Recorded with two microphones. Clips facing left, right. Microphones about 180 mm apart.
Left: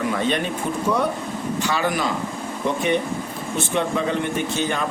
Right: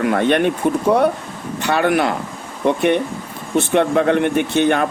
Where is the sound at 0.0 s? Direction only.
60° right (ahead or behind).